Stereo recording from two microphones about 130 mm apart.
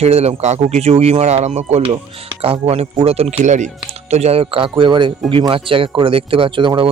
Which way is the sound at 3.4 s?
70° right (ahead or behind).